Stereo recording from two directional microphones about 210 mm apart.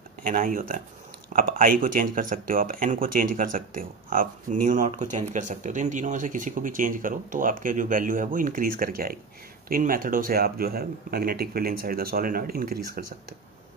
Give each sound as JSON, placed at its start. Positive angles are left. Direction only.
{"t": 0.2, "sound": "speech", "side_deg": -40}